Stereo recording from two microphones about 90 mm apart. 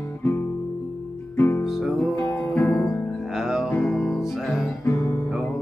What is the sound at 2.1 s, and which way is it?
Music, 20° left (ahead or behind).